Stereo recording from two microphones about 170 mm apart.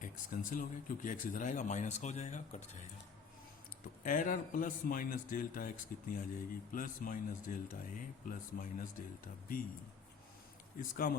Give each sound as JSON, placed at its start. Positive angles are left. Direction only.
{"t": 0.5, "sound": "speech", "side_deg": 50}
{"t": 4.0, "sound": "speech", "side_deg": 55}
{"t": 10.8, "sound": "speech", "side_deg": 55}